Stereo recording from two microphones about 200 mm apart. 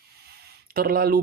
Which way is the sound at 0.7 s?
50° right (ahead or behind).